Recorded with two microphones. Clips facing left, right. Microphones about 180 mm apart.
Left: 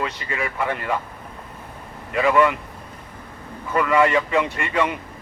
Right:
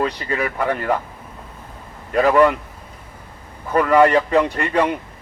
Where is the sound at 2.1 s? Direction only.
40° right (ahead or behind).